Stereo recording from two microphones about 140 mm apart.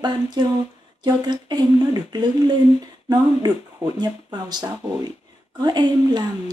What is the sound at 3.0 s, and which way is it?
Speech, 30° right (ahead or behind).